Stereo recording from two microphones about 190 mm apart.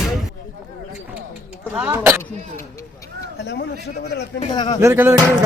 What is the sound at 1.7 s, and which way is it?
Speech, 10° right (ahead or behind).